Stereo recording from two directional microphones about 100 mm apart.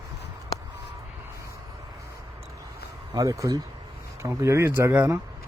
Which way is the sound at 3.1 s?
35° right (ahead or behind).